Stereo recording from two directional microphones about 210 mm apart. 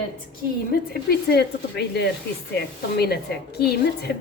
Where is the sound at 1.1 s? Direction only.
50° left (ahead or behind).